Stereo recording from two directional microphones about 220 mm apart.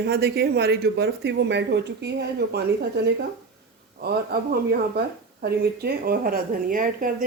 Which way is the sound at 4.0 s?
45° right (ahead or behind).